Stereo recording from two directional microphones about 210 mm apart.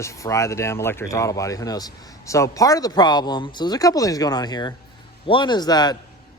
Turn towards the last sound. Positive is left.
turn(degrees=20)  # may be behind; listen again after turning